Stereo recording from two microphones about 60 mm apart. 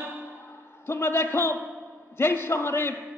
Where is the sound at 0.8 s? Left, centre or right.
Left.